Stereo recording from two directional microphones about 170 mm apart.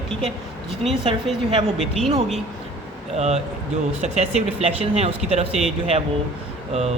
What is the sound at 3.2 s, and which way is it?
Speech, 40° right (ahead or behind).